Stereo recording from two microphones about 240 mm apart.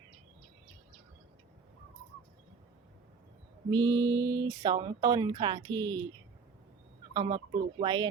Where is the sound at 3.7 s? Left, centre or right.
Centre.